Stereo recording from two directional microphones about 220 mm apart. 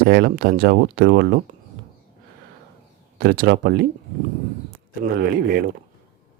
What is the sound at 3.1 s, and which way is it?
Speech, 40° right (ahead or behind).